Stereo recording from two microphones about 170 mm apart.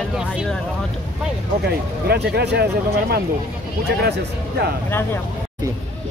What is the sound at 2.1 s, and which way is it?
Speech, 80° right.